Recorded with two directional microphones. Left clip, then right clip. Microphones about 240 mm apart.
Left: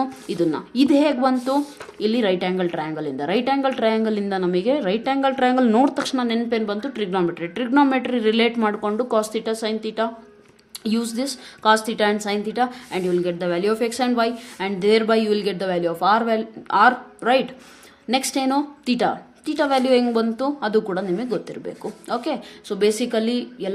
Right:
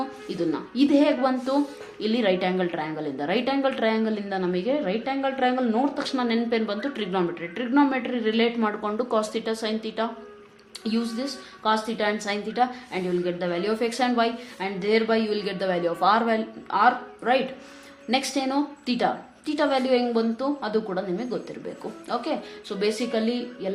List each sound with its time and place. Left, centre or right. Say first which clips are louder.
0.0 s a woman's voice: left 6 dB; left